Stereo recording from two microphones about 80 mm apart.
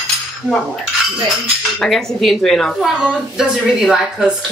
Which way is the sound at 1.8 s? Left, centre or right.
Centre.